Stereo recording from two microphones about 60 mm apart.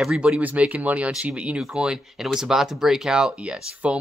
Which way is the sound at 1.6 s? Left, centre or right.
Centre.